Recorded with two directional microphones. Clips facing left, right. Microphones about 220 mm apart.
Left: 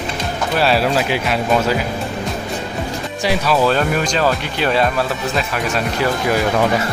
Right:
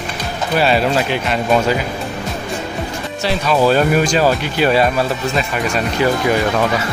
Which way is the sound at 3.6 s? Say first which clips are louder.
Right 3 dB; 10° right (ahead or behind).